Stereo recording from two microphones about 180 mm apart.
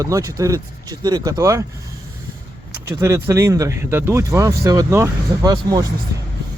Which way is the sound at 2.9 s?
15° right (ahead or behind).